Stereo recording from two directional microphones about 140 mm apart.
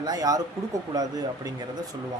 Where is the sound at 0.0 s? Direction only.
25° right (ahead or behind).